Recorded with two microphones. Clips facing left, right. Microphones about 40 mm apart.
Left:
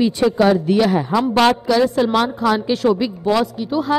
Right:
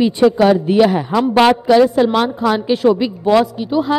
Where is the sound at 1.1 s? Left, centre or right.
Centre.